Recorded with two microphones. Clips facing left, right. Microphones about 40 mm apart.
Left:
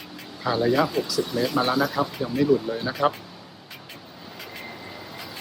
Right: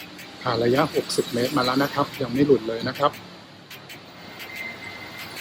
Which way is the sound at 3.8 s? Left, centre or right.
Right.